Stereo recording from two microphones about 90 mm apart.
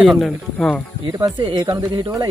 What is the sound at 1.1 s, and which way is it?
Speech, 45° right (ahead or behind).